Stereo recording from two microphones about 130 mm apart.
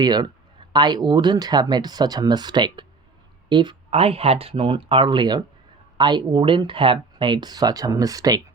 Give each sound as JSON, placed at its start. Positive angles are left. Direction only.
{"t": 0.0, "sound": "speech", "side_deg": -35}